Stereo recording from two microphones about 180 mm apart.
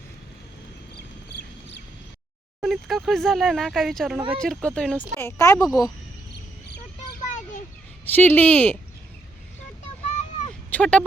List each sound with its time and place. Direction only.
2.6 s speech: centre (ahead or behind); by 5.9 s 20° left (ahead or behind)
7.2 s children playing: 45° left (ahead or behind)
8.0 s speech: 10° left (ahead or behind)
10.7 s speech: 5° left (ahead or behind)